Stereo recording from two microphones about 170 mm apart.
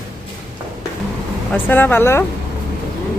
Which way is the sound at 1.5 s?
10° left (ahead or behind).